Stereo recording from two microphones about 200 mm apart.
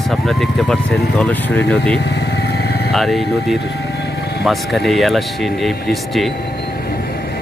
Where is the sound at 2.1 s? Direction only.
60° left (ahead or behind).